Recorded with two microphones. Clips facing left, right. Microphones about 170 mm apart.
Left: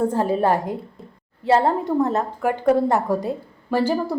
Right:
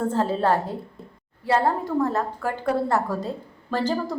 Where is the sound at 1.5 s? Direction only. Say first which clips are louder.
Left 4 dB; 25° left (ahead or behind).